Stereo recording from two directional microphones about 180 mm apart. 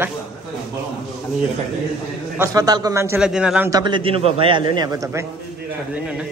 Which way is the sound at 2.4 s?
20° right (ahead or behind).